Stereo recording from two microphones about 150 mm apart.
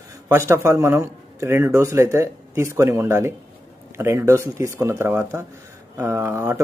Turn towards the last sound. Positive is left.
turn(degrees=-15)  # may be behind; listen again after turning